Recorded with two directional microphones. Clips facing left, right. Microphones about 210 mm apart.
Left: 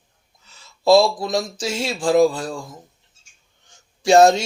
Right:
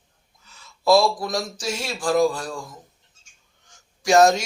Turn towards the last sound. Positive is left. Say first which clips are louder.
# left 3 dB
turn(degrees=30)  # may be behind; listen again after turning